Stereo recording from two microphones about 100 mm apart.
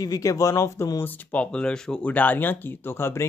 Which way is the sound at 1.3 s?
10° left (ahead or behind).